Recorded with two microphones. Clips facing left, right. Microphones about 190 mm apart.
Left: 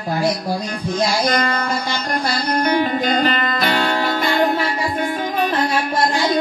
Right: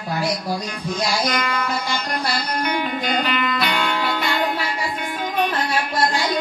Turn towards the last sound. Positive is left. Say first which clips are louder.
# left 5 dB
turn(degrees=45)  # may be behind; listen again after turning